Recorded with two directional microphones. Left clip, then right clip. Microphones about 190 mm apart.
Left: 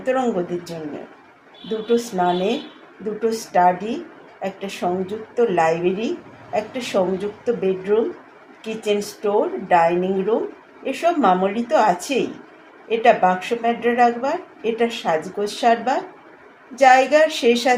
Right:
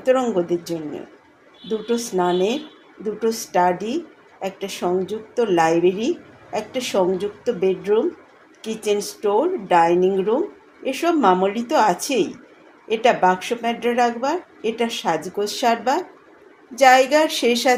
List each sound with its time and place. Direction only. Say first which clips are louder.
0.0 s a woman's voice: right 2 dB; 40° right (ahead or behind)